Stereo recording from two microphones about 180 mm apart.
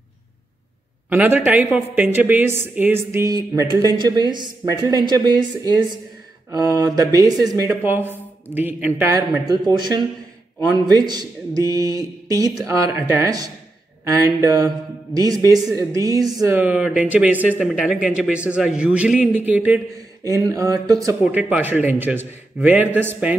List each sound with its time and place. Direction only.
1.1 s a woman's voice: 10° right (ahead or behind)
6.5 s a woman's voice: 20° right (ahead or behind)
21.2 s a woman's voice: 10° right (ahead or behind)